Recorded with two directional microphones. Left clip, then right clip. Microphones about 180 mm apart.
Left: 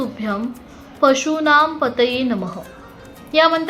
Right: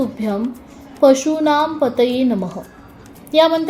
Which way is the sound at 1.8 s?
50° right (ahead or behind).